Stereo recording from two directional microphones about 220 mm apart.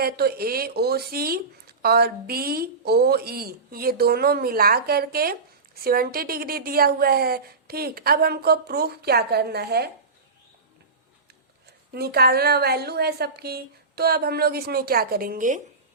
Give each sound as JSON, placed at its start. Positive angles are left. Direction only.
{"t": 0.0, "sound": "speech", "side_deg": -45}
{"t": 11.9, "sound": "speech", "side_deg": -45}